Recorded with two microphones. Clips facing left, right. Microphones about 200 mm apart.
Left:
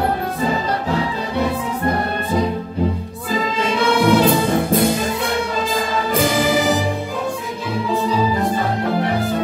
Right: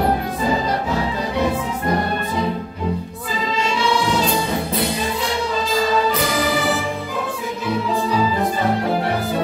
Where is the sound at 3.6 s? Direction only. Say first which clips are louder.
Left 3 dB; 55° left (ahead or behind).